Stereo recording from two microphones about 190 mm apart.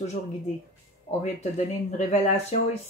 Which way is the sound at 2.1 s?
40° left (ahead or behind).